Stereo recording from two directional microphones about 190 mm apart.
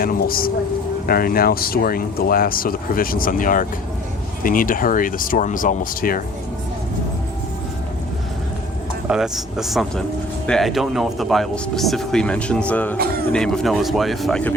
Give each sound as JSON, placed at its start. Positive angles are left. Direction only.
{"t": 0.0, "sound": "speech", "side_deg": 50}
{"t": 9.0, "sound": "speech", "side_deg": -5}